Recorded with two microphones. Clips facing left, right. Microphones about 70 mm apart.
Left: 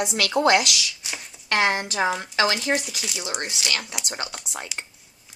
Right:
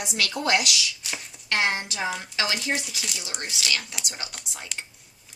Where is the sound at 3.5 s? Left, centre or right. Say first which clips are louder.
Left 1 dB; left.